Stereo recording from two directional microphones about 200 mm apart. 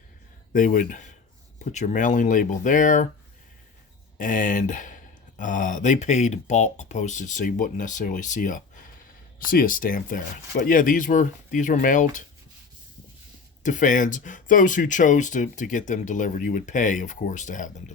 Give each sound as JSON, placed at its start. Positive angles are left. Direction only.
{"t": 0.5, "sound": "speech", "side_deg": 40}
{"t": 4.2, "sound": "speech", "side_deg": 40}
{"t": 13.6, "sound": "speech", "side_deg": 40}